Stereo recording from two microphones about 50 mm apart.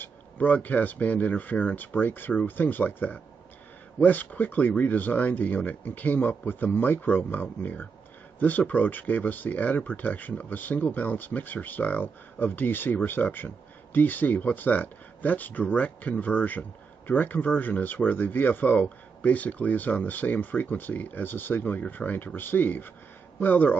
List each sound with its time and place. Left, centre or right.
0.0 s speech: left